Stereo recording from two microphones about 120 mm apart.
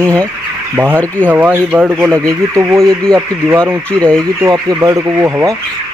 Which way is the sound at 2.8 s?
5° left (ahead or behind).